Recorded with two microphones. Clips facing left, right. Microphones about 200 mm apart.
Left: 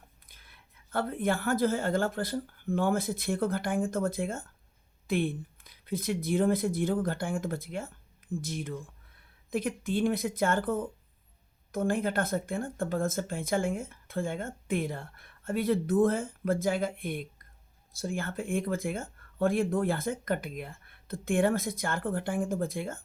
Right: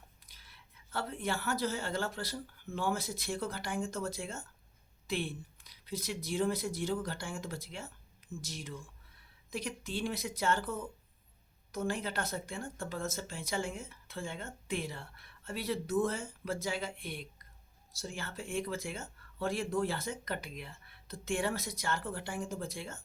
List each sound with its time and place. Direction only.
0.3 s speech: 55° left (ahead or behind)